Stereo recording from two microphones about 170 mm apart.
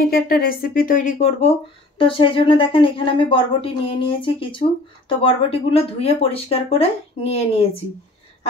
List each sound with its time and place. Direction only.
0.1 s speech: 60° left (ahead or behind); by 1.5 s 45° left (ahead or behind)
2.0 s speech: 30° left (ahead or behind)